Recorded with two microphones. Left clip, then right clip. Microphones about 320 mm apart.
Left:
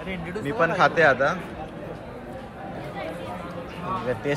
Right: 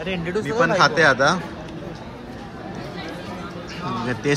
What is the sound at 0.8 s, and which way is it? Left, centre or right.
Speech, centre.